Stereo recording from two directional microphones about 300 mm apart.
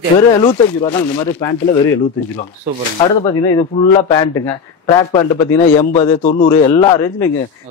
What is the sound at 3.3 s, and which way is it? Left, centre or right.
A man's voice, centre.